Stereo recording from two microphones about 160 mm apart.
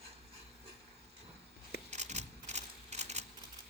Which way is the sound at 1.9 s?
45° right (ahead or behind).